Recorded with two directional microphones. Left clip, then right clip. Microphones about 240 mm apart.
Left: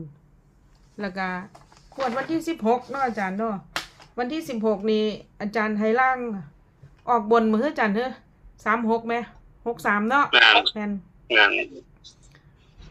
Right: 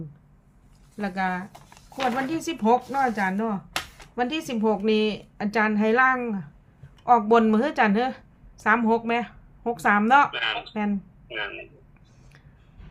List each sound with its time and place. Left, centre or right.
0.9 s a woman's voice: centre
10.3 s a man's voice: left